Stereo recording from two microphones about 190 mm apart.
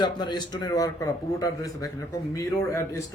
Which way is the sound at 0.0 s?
25° left (ahead or behind).